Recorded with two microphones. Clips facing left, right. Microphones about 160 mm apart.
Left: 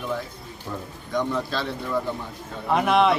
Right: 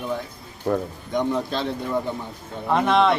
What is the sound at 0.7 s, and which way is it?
Speech, 65° right (ahead or behind).